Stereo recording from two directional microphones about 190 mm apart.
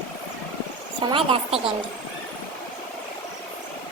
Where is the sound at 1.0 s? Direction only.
30° right (ahead or behind).